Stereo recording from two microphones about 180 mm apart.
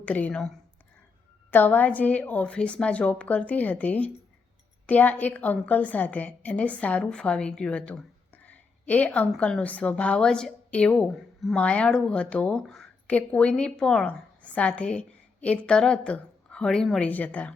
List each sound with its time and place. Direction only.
0.0 s a woman's voice: 10° left (ahead or behind)